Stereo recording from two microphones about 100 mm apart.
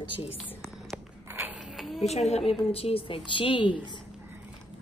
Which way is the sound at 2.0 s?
90° left.